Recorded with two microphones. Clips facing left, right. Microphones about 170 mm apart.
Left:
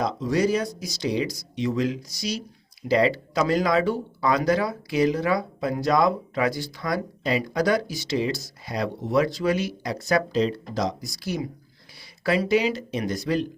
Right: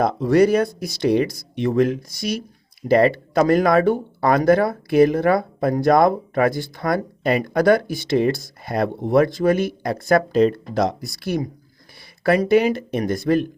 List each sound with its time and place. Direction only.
0.0 s speech: 60° right (ahead or behind)